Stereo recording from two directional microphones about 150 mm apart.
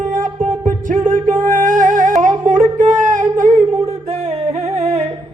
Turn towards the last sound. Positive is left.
turn(degrees=-45)  # may be behind; listen again after turning